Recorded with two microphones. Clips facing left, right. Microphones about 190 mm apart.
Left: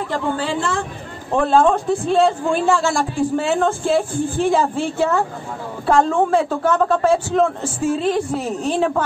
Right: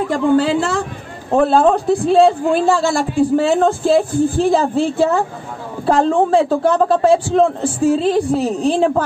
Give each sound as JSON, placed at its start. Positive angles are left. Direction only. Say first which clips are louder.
{"t": 0.5, "sound": "a man's voice", "louder": "right 5 dB", "side_deg": -40}